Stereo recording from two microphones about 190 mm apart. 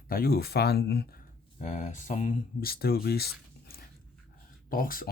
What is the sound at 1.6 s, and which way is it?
Speech, 40° left (ahead or behind).